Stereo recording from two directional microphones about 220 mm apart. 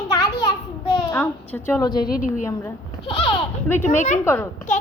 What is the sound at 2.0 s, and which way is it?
Speech, 40° left (ahead or behind).